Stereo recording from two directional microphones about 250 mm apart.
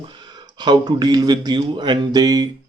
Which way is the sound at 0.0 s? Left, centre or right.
Centre.